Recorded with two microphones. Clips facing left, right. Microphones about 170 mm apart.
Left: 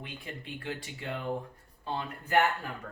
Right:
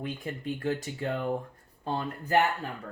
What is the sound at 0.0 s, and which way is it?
Speech, 40° right (ahead or behind).